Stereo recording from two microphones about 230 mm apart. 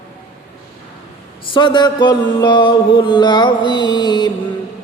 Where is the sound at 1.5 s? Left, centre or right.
Left.